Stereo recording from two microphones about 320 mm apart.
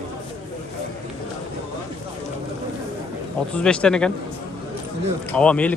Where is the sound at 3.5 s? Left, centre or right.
Centre.